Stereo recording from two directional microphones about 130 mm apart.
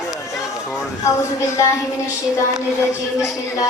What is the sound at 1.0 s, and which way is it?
Speech, 25° left (ahead or behind).